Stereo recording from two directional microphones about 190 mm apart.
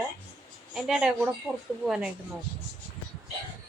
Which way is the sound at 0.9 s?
5° right (ahead or behind).